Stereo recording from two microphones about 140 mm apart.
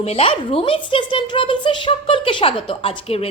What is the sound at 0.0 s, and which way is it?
A woman's voice, 45° left (ahead or behind).